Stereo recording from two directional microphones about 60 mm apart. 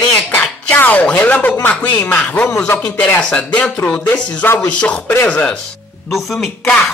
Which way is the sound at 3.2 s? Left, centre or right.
Left.